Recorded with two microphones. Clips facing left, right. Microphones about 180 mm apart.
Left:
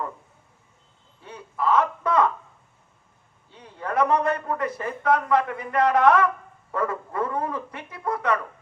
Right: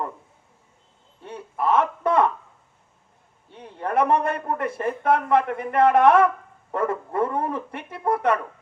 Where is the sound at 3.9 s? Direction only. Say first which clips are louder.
Right 1 dB; 25° right (ahead or behind).